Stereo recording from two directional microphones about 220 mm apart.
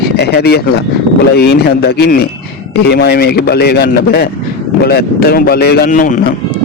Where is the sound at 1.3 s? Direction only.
50° left (ahead or behind).